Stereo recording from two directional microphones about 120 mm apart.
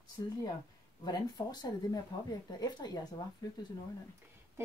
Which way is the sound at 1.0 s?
35° left (ahead or behind).